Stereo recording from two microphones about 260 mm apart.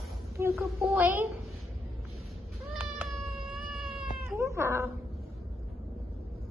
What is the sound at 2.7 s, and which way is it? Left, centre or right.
Cat, centre.